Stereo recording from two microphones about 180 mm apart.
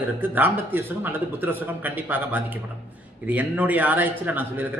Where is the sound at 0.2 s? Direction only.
10° right (ahead or behind).